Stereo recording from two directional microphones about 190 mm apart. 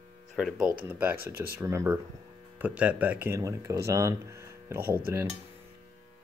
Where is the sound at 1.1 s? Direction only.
50° right (ahead or behind).